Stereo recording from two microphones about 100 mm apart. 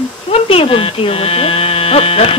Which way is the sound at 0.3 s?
70° left (ahead or behind).